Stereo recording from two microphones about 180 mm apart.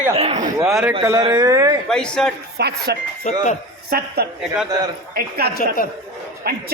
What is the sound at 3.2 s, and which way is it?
Speech, 40° left (ahead or behind).